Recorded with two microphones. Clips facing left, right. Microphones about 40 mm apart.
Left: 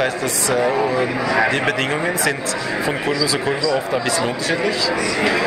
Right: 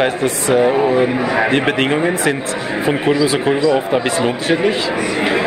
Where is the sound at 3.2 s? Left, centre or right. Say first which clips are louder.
Right 5 dB; right.